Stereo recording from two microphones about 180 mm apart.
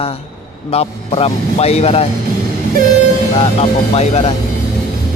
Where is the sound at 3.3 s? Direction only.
35° left (ahead or behind).